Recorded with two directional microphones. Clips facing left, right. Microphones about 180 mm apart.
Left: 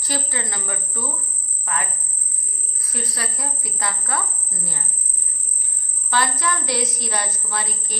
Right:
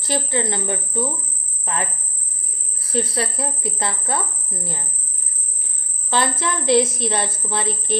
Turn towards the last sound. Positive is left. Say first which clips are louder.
# right 7 dB
turn(degrees=-25)  # may be behind; listen again after turning